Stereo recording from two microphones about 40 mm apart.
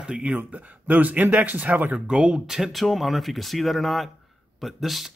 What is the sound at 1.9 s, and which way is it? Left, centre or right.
Speech, right.